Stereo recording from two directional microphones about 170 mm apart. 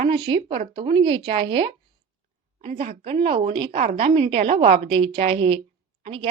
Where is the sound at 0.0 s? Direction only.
30° right (ahead or behind).